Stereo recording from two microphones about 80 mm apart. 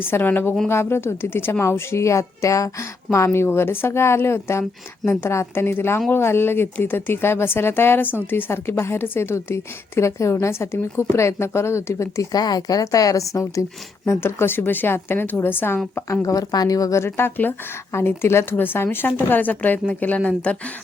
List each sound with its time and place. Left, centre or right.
0.0 s speech: left
12.4 s speech: left
16.2 s speech: left
17.0 s speech: left